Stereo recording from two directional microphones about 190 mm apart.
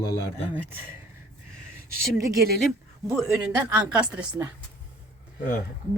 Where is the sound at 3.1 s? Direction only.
5° right (ahead or behind).